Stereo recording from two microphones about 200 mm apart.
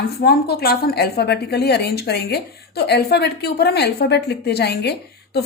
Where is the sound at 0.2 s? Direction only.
50° left (ahead or behind).